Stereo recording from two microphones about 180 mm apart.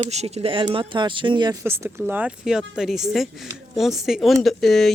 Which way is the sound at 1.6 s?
15° right (ahead or behind).